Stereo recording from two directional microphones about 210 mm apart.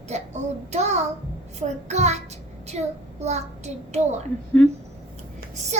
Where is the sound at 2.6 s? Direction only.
30° right (ahead or behind).